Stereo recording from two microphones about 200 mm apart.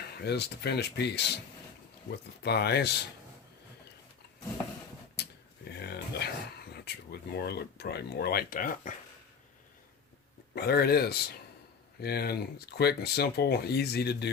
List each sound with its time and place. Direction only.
0.2 s speech: 55° left (ahead or behind)
5.1 s a sound: 55° left (ahead or behind)
6.7 s speech: 55° left (ahead or behind)
10.5 s speech: 50° left (ahead or behind)